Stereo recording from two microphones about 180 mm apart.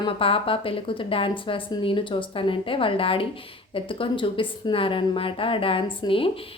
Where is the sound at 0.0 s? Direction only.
30° left (ahead or behind).